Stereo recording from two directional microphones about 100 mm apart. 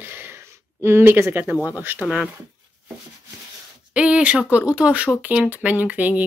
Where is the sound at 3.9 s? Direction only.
10° right (ahead or behind).